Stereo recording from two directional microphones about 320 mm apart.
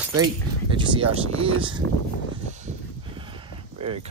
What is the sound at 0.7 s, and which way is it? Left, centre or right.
Speech, centre.